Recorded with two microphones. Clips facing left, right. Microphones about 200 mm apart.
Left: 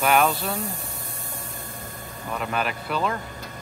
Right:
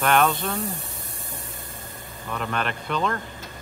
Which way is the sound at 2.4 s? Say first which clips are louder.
Even; 5° left (ahead or behind).